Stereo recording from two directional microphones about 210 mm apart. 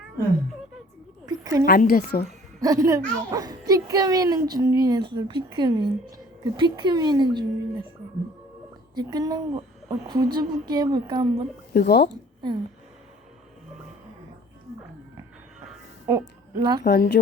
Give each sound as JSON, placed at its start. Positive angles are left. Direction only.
{"t": 1.3, "sound": "a sound", "side_deg": -15}
{"t": 1.6, "sound": "a woman's voice", "side_deg": 45}
{"t": 2.6, "sound": "a child's voice", "side_deg": -15}
{"t": 9.0, "sound": "a woman's voice", "side_deg": -20}
{"t": 11.7, "sound": "a woman's voice", "side_deg": 50}
{"t": 16.0, "sound": "a woman's voice", "side_deg": -20}
{"t": 16.8, "sound": "a woman's voice", "side_deg": 50}